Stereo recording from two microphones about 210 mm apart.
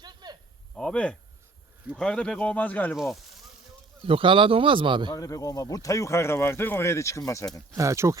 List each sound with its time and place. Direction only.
0.0 s a sound: 20° right (ahead or behind)
0.8 s speech: 5° left (ahead or behind)
4.0 s speech: 25° right (ahead or behind)
5.1 s speech: 15° left (ahead or behind)
7.8 s speech: 15° right (ahead or behind)